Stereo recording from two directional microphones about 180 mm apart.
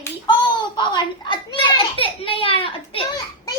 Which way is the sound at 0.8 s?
25° left (ahead or behind).